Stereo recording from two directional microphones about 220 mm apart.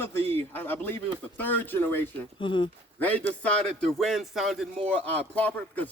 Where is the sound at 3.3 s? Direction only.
5° left (ahead or behind).